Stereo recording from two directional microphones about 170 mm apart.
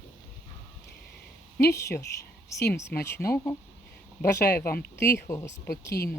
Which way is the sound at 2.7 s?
15° left (ahead or behind).